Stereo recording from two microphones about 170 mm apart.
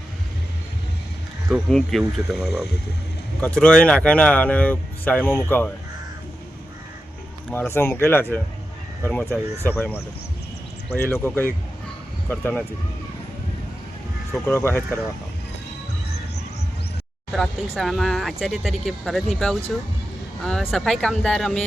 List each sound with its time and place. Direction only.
1.5 s speech: centre (ahead or behind)
7.5 s speech: 15° left (ahead or behind)
14.4 s speech: 15° left (ahead or behind)
17.7 s speech: centre (ahead or behind)